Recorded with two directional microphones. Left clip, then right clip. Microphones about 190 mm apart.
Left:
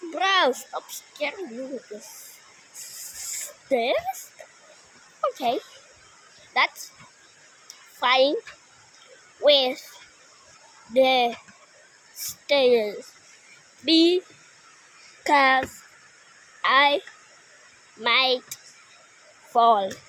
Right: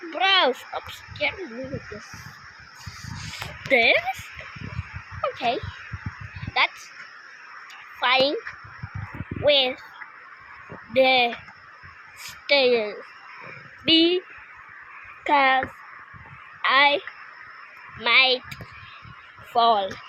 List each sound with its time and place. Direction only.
0.2 s speech: 15° left (ahead or behind)
3.7 s speech: 5° left (ahead or behind)
5.2 s babbling: 20° left (ahead or behind)
7.9 s a child's voice: 20° left (ahead or behind)
9.4 s speech: 20° left (ahead or behind)
10.9 s speech: 20° left (ahead or behind)
12.5 s speech: 20° left (ahead or behind)
15.2 s a child's voice: 25° left (ahead or behind)
18.0 s speech: 15° left (ahead or behind)
19.5 s speech: 20° left (ahead or behind)